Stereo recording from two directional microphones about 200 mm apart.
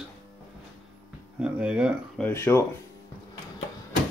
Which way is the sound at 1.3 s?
5° right (ahead or behind).